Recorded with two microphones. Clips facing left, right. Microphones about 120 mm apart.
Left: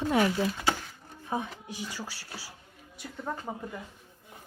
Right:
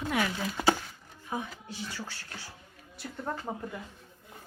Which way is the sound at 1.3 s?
25° left (ahead or behind).